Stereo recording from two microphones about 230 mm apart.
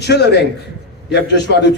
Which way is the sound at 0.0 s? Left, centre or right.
Left.